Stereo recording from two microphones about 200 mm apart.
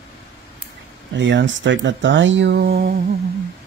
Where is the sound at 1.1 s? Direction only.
70° right (ahead or behind); by 2.9 s 50° right (ahead or behind).